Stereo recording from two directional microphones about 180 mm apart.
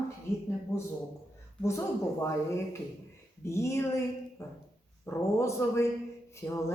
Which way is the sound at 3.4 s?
15° left (ahead or behind).